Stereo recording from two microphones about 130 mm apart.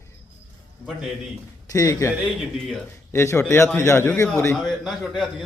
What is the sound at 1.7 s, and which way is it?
Speech, 25° left (ahead or behind).